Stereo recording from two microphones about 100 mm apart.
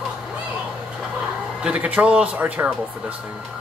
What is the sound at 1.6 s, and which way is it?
Speech, 15° right (ahead or behind).